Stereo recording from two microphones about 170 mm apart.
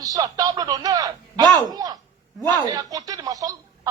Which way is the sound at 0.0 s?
20° right (ahead or behind).